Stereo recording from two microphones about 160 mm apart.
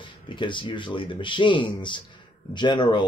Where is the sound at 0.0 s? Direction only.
30° left (ahead or behind).